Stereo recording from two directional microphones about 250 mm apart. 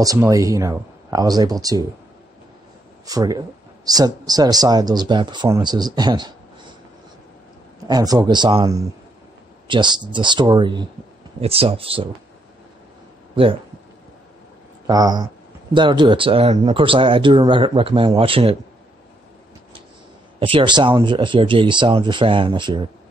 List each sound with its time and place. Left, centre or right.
0.0 s speech: centre
3.1 s speech: centre
7.9 s speech: centre
14.9 s speech: centre
20.3 s speech: right